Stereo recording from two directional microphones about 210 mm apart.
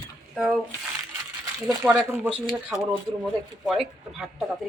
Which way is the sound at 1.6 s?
5° right (ahead or behind).